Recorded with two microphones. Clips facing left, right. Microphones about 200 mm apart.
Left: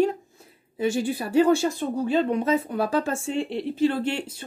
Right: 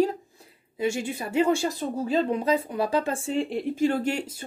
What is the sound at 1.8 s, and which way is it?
Speech, 40° right (ahead or behind).